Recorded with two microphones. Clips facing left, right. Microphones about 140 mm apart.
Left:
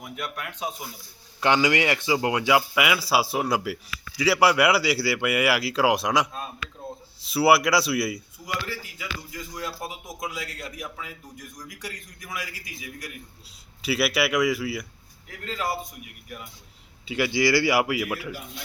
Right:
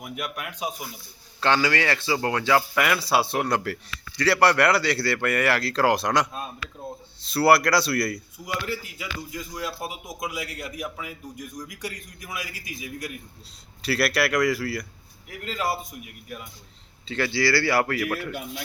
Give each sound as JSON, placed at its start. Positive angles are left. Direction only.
{"t": 0.0, "sound": "a man's voice", "side_deg": -15}
{"t": 1.4, "sound": "speech", "side_deg": 15}
{"t": 8.4, "sound": "a man's voice", "side_deg": -10}
{"t": 9.6, "sound": "a man's voice", "side_deg": -15}
{"t": 13.8, "sound": "speech", "side_deg": 0}
{"t": 15.4, "sound": "a man's voice", "side_deg": -15}
{"t": 17.1, "sound": "a man's voice", "side_deg": 15}